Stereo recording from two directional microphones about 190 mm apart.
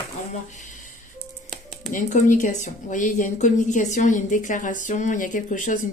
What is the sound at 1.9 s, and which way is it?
Speech, 40° left (ahead or behind).